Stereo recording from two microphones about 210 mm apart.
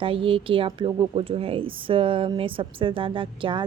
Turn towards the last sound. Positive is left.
turn(degrees=-25)  # may be behind; listen again after turning